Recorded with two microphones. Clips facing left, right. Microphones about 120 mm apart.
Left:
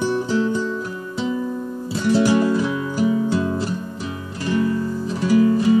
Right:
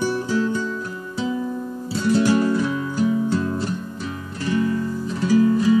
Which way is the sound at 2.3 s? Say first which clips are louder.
Left 1 dB; 10° left (ahead or behind).